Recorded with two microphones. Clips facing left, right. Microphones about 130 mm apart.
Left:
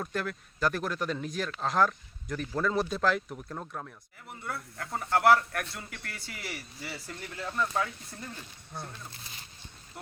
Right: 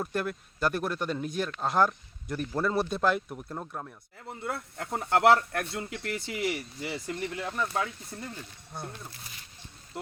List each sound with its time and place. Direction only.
0.0 s speech: 5° right (ahead or behind)
4.3 s speech: 25° right (ahead or behind)